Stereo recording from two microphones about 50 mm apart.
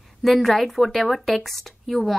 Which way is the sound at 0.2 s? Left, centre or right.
Centre.